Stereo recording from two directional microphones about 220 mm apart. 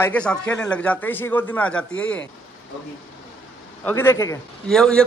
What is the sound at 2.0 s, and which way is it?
Speech, 60° left (ahead or behind).